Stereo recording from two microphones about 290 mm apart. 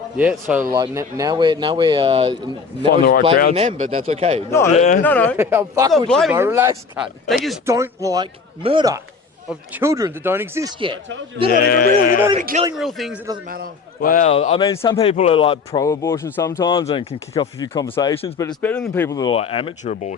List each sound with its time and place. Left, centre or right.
0.2 s speech: centre
2.9 s speech: left
3.5 s speech: right
4.7 s speech: left
5.0 s speech: centre
5.4 s speech: centre
6.1 s speech: centre
6.3 s speech: centre
11.5 s speech: left
12.4 s speech: right
12.7 s speech: centre
14.0 s speech: left